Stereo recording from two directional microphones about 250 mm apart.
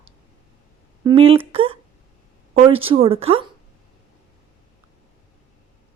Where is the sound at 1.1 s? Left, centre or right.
Right.